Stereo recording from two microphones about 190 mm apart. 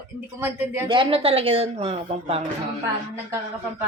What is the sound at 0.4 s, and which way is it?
Speech, 10° right (ahead or behind).